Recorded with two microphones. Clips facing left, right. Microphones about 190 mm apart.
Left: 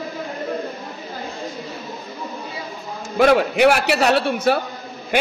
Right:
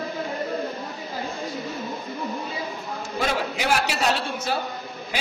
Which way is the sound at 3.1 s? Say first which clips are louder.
Left 11 dB; 65° left (ahead or behind).